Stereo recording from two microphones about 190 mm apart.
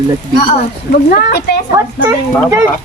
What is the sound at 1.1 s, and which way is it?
Speech, 55° left (ahead or behind).